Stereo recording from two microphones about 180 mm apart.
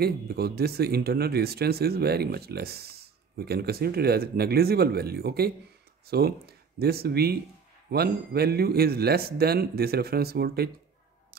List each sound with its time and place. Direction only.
0.0 s speech: 60° right (ahead or behind)